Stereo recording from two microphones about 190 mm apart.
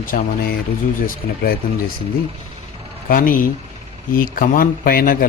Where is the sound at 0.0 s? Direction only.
45° left (ahead or behind).